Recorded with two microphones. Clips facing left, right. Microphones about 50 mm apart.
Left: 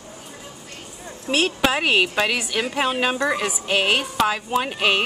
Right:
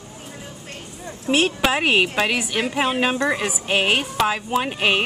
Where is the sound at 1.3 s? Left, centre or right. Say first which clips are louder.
Right 1 dB; centre.